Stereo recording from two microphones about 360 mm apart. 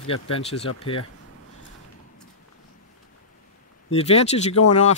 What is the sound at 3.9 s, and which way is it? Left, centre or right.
Speech, centre.